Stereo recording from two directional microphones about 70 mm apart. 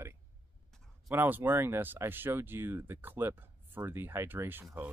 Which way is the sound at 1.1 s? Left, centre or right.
Right.